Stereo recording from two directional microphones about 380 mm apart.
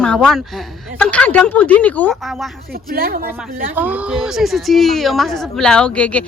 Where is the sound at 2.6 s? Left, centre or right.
Right.